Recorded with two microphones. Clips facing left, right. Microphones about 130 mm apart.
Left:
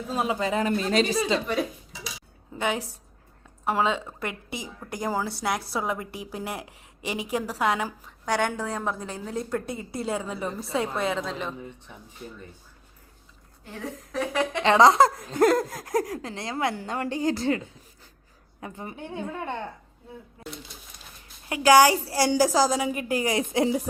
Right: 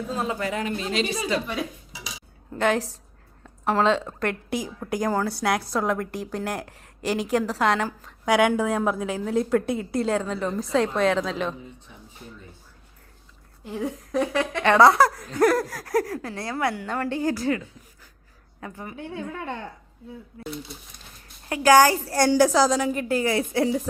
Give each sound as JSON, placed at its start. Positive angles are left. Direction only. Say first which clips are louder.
{"t": 0.2, "sound": "speech", "louder": "left 3 dB", "side_deg": 20}
{"t": 0.6, "sound": "speech", "louder": "left 3 dB", "side_deg": 40}
{"t": 1.5, "sound": "a woman's voice", "louder": "left 3 dB", "side_deg": 0}
{"t": 8.2, "sound": "a woman's voice", "louder": "right 6 dB", "side_deg": -5}
{"t": 13.7, "sound": "a woman's voice", "louder": "right 6 dB", "side_deg": 0}
{"t": 14.3, "sound": "speech", "louder": "right 1 dB", "side_deg": 20}
{"t": 21.7, "sound": "a woman's voice", "louder": "right 1 dB", "side_deg": 10}